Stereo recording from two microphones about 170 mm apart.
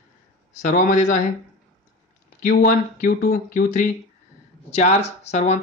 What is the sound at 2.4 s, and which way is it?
Speech, 55° left (ahead or behind).